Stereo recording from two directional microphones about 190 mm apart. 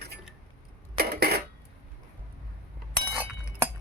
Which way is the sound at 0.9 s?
55° right (ahead or behind).